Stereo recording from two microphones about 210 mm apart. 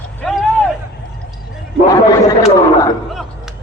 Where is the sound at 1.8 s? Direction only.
15° left (ahead or behind).